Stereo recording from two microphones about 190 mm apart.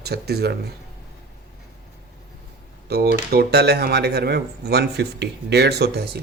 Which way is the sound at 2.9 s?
55° right (ahead or behind).